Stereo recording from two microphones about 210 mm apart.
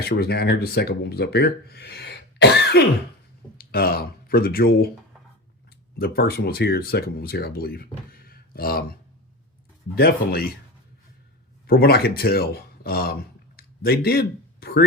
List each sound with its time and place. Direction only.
0.0 s speech: 50° left (ahead or behind)
6.0 s speech: 50° left (ahead or behind)
11.6 s speech: 45° left (ahead or behind)